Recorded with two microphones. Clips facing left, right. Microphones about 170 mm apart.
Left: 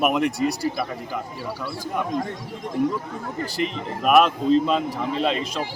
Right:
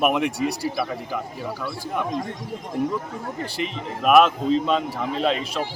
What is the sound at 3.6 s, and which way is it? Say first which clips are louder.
Speech: left 3 dB; centre (ahead or behind).